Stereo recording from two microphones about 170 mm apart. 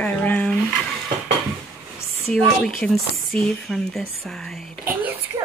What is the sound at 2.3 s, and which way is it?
Speech, 5° left (ahead or behind).